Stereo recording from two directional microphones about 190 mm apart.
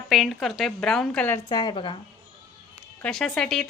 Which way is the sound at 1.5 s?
20° left (ahead or behind).